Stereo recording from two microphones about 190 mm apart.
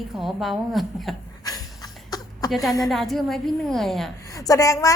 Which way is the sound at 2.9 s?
Centre (ahead or behind).